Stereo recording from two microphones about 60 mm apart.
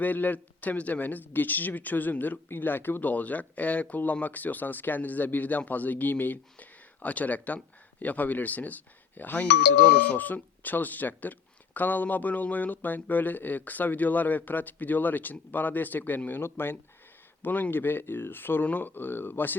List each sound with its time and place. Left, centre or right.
0.0 s speech: left